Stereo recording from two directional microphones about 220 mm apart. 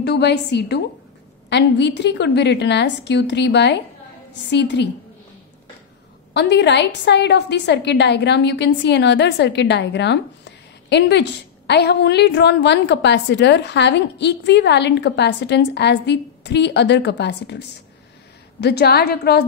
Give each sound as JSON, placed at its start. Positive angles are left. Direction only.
{"t": 0.0, "sound": "a woman's voice", "side_deg": 50}
{"t": 6.3, "sound": "a woman's voice", "side_deg": 50}